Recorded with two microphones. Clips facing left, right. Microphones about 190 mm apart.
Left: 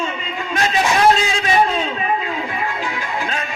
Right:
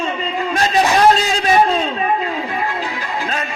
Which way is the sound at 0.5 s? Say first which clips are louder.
Right 2 dB; 35° right (ahead or behind).